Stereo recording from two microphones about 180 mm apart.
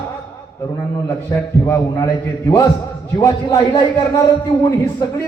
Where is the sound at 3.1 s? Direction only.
20° left (ahead or behind).